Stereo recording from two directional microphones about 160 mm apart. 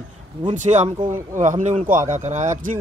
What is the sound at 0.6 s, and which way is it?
Speech, 45° right (ahead or behind).